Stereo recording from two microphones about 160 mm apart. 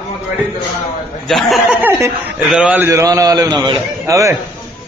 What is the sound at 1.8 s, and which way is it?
A man's voice, 15° right (ahead or behind).